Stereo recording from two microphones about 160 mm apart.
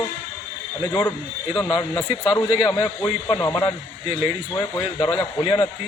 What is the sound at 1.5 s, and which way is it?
A man's voice, 25° left (ahead or behind).